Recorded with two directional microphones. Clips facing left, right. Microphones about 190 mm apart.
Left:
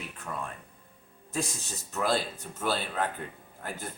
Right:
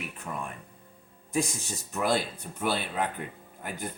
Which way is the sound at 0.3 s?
10° right (ahead or behind).